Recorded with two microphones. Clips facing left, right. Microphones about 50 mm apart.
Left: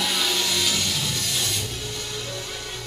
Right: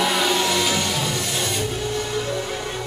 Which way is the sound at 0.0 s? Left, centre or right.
Centre.